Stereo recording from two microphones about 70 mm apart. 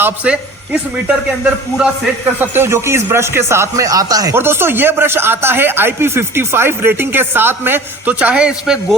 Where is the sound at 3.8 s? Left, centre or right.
Right.